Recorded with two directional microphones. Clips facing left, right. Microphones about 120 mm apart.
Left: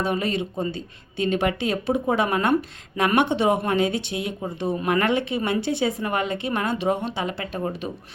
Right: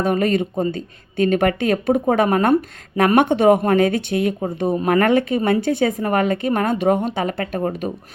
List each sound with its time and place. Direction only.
0.0 s speech: 50° right (ahead or behind)
4.4 s speech: 40° right (ahead or behind)